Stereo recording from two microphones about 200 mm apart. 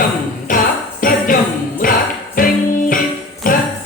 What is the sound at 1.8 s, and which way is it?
Music, 40° left (ahead or behind).